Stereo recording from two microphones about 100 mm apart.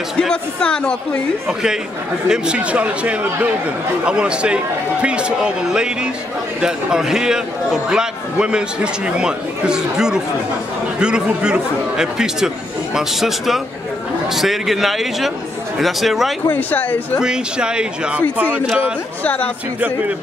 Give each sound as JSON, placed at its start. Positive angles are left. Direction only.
{"t": 0.2, "sound": "speech", "side_deg": 10}
{"t": 2.2, "sound": "a man's voice", "side_deg": -10}
{"t": 16.4, "sound": "speech", "side_deg": 20}
{"t": 17.2, "sound": "a man's voice", "side_deg": -10}
{"t": 19.2, "sound": "speech", "side_deg": 15}